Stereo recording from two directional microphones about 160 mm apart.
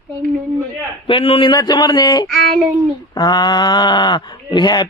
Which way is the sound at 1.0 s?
35° left (ahead or behind).